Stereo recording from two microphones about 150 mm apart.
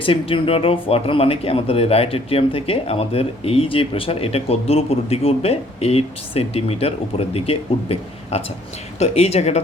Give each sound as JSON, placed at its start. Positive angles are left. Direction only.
{"t": 0.0, "sound": "speech", "side_deg": 35}